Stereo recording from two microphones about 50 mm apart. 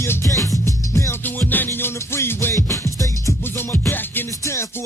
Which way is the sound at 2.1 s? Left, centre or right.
Left.